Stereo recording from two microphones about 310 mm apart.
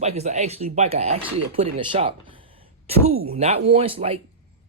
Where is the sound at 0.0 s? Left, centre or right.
Right.